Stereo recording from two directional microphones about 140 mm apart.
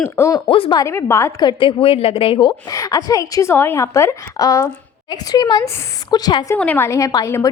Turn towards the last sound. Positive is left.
turn(degrees=25)  # may be behind; listen again after turning